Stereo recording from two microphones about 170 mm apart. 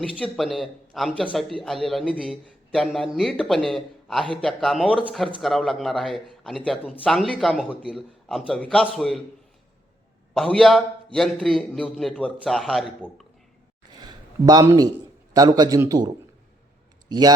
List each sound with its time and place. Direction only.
0.2 s a man's voice: centre (ahead or behind)
10.3 s a man's voice: centre (ahead or behind)
13.9 s a sound: 25° right (ahead or behind)
15.3 s a man's voice: 25° right (ahead or behind)